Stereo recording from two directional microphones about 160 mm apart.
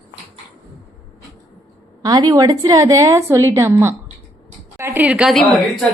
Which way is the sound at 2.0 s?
25° right (ahead or behind).